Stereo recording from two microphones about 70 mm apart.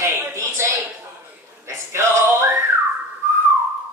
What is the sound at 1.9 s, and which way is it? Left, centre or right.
Male singing, right.